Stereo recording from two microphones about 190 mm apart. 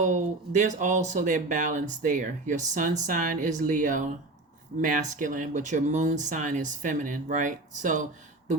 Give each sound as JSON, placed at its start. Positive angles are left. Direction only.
{"t": 0.0, "sound": "speech", "side_deg": -40}